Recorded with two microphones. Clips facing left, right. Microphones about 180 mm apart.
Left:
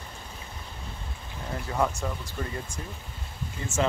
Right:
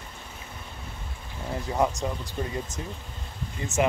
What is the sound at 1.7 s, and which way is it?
Speech, 20° right (ahead or behind).